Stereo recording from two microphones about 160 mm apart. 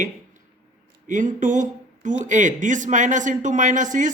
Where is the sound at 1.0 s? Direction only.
50° right (ahead or behind).